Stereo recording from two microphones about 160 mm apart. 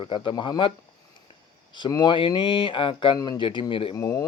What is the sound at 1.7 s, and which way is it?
Speech, 25° left (ahead or behind).